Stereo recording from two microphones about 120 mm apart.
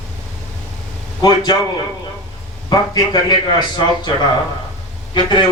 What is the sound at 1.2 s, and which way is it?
Speech, 35° left (ahead or behind).